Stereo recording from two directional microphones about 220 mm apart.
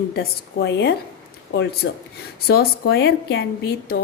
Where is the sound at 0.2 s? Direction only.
55° left (ahead or behind).